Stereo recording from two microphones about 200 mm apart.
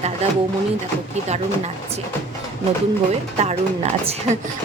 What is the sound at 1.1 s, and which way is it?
Speech, 35° right (ahead or behind).